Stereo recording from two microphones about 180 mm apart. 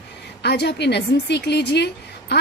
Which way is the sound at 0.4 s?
65° left (ahead or behind).